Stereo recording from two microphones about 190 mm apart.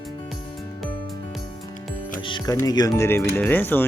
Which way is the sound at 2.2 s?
20° left (ahead or behind).